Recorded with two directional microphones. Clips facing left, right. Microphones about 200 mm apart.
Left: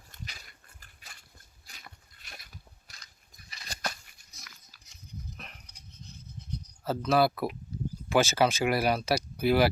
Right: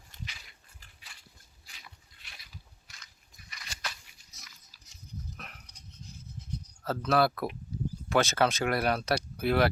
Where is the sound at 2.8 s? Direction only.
35° left (ahead or behind).